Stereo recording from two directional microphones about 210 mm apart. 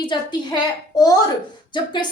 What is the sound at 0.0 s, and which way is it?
Speech, 20° left (ahead or behind).